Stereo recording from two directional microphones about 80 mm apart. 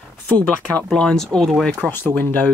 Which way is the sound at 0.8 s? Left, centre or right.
Centre.